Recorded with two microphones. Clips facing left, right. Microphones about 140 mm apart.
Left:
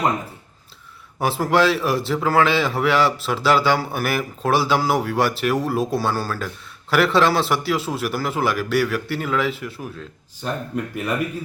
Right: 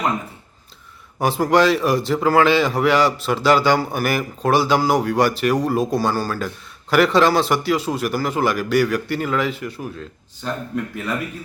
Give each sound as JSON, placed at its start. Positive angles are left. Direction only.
{"t": 1.2, "sound": "a man's voice", "side_deg": 0}